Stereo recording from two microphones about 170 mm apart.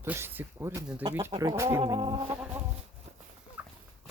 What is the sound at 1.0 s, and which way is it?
Speech, 25° right (ahead or behind).